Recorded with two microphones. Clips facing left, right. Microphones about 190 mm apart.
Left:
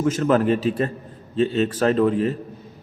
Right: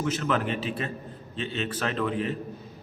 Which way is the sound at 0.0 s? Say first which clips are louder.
Left 8 dB; 45° left (ahead or behind).